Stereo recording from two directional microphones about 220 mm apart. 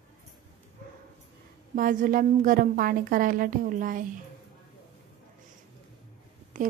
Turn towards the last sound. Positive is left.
turn(degrees=-35)  # may be behind; listen again after turning